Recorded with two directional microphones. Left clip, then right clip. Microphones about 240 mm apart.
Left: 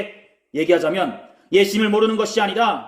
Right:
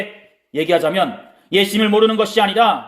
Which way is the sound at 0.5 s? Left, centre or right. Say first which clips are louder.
Right 2 dB; centre.